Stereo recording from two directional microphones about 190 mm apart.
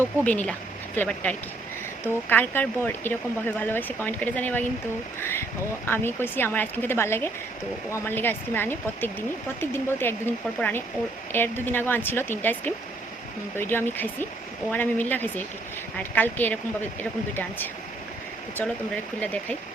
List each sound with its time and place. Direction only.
0.3 s speech: 5° left (ahead or behind)
19.2 s speech: 5° left (ahead or behind)